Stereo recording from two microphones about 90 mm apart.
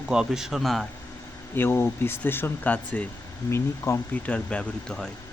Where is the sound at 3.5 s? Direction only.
30° left (ahead or behind).